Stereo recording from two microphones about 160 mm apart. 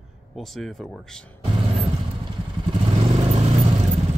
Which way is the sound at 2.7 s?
40° right (ahead or behind).